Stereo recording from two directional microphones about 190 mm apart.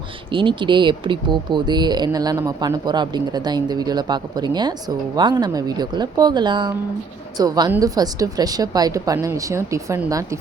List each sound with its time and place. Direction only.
0.3 s a woman's voice: 25° right (ahead or behind)